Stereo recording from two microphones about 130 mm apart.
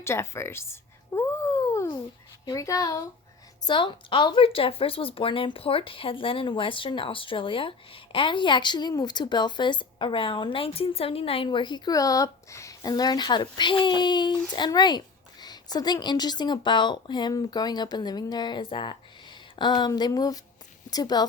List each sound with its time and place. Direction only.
0.0 s a sound: 20° left (ahead or behind)
2.4 s speech: 30° left (ahead or behind)
3.6 s speech: 35° left (ahead or behind)